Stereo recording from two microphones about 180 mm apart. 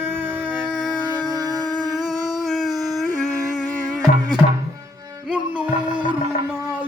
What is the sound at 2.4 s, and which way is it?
Howl, centre (ahead or behind).